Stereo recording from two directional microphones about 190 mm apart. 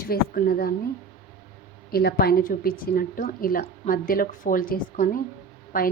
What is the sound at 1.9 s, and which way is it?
A woman's voice, 55° left (ahead or behind).